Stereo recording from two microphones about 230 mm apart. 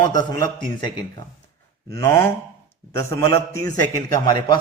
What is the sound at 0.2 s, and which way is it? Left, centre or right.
Speech, centre.